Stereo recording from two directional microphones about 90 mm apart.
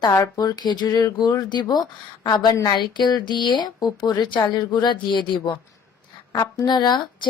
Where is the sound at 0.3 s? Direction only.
50° left (ahead or behind).